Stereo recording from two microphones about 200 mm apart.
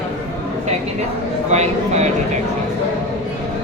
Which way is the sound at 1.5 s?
35° right (ahead or behind).